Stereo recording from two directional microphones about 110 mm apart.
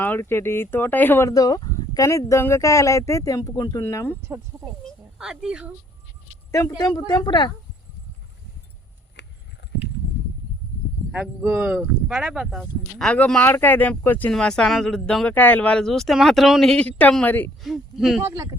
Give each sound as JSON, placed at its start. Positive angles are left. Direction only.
{"t": 0.0, "sound": "speech", "side_deg": 20}
{"t": 1.3, "sound": "speech", "side_deg": 35}
{"t": 5.1, "sound": "speech", "side_deg": -5}
{"t": 6.5, "sound": "speech", "side_deg": 35}
{"t": 11.1, "sound": "speech", "side_deg": -10}
{"t": 14.3, "sound": "speech", "side_deg": 5}
{"t": 17.6, "sound": "speech", "side_deg": 0}
{"t": 18.2, "sound": "speech", "side_deg": -25}